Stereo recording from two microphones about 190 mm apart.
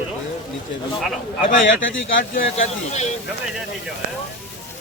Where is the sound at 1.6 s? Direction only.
80° left.